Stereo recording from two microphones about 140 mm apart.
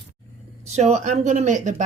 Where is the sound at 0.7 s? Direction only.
55° right (ahead or behind).